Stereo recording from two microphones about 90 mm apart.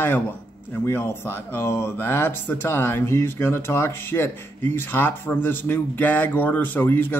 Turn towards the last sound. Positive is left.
turn(degrees=20)  # may be behind; listen again after turning